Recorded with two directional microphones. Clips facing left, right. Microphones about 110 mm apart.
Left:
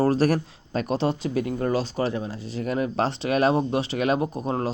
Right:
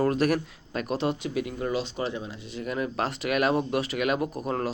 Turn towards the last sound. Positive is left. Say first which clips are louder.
# left 2 dB
turn(degrees=25)  # may be behind; listen again after turning